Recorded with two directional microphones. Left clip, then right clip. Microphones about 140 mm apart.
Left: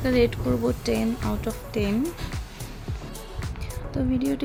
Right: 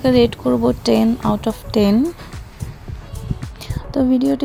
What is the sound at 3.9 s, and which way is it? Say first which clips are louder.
Speech: right 10 dB; 45° right (ahead or behind).